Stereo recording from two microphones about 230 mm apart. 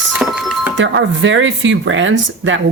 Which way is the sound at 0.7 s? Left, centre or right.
Right.